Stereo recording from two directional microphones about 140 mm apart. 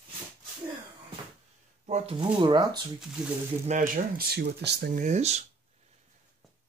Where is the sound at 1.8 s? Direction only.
50° right (ahead or behind).